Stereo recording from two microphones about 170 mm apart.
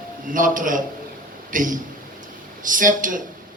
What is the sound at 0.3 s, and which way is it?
A man's voice, 50° right (ahead or behind).